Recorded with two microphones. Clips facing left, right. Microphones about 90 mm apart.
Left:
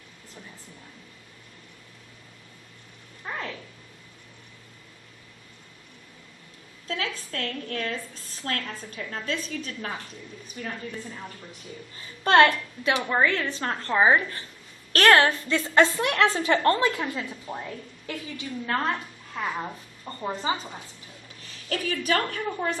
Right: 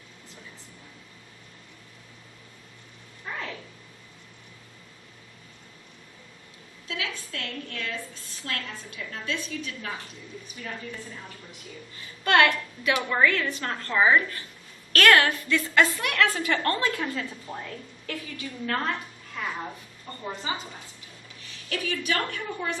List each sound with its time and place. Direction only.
6.8 s a woman's voice: 40° left (ahead or behind)
11.9 s a woman's voice: 30° left (ahead or behind)